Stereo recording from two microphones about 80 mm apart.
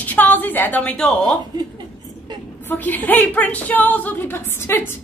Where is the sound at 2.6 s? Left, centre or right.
Left.